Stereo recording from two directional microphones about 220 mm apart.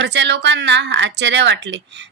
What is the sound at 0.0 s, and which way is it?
A woman's voice, 55° right (ahead or behind).